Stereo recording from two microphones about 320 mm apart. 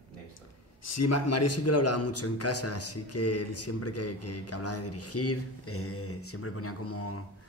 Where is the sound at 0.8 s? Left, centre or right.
Left.